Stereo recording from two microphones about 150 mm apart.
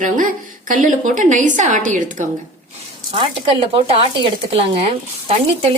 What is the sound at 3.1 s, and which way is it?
Speech, 35° right (ahead or behind).